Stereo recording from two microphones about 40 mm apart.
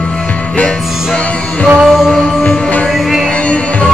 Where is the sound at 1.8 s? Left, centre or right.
Centre.